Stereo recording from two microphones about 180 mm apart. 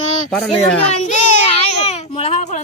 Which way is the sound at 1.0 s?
40° left (ahead or behind).